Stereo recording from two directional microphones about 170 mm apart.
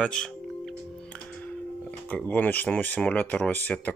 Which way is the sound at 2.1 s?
10° left (ahead or behind).